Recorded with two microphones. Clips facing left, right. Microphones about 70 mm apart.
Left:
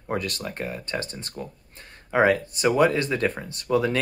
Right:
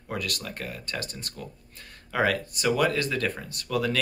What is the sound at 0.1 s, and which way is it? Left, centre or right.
Speech, left.